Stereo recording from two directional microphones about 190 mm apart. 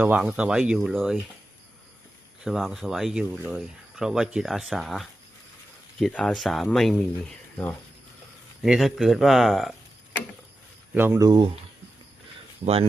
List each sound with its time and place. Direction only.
0.0 s speech: 10° right (ahead or behind)
2.4 s speech: centre (ahead or behind)
10.9 s speech: 10° right (ahead or behind)
12.6 s speech: 35° right (ahead or behind)